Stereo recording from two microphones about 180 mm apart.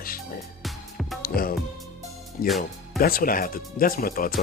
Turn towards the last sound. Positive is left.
turn(degrees=50)  # may be behind; listen again after turning